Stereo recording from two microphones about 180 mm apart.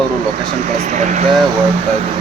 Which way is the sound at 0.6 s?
40° right (ahead or behind).